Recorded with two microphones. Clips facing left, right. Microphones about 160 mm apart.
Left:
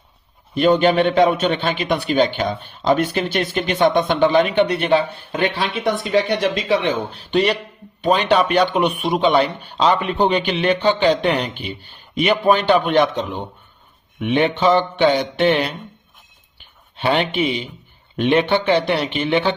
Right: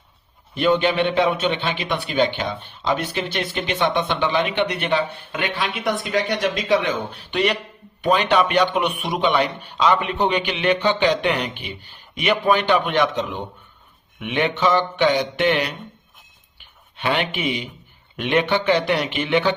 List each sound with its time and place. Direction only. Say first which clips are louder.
0.5 s a man's voice: left 4 dB; 40° left (ahead or behind)
17.0 s a man's voice: left 4 dB; 30° left (ahead or behind)